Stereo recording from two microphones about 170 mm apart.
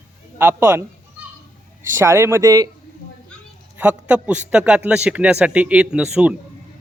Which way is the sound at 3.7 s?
10° right (ahead or behind).